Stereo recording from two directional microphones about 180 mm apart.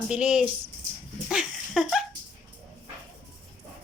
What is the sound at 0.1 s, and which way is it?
Speech, 5° right (ahead or behind).